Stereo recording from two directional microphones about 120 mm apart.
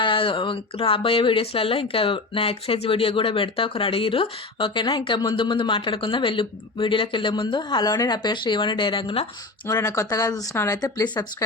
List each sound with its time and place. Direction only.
0.0 s a man's voice: 45° left (ahead or behind)
9.6 s speech: 25° left (ahead or behind)